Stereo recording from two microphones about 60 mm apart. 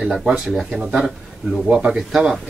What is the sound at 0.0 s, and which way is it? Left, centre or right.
Speech, centre.